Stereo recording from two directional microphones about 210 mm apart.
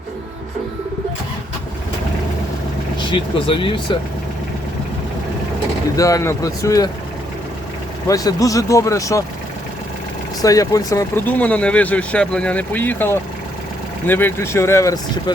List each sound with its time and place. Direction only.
3.1 s speech: 25° left (ahead or behind)
6.0 s speech: 15° left (ahead or behind)
8.0 s speech: 15° left (ahead or behind)
10.4 s speech: 15° left (ahead or behind)